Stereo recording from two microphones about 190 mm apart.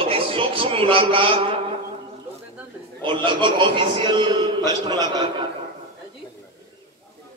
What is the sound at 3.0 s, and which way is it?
A man's voice, 25° right (ahead or behind).